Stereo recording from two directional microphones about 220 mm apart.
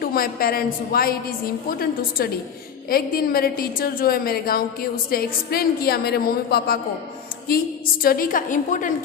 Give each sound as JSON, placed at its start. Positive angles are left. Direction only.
{"t": 0.0, "sound": "a woman's voice", "side_deg": 45}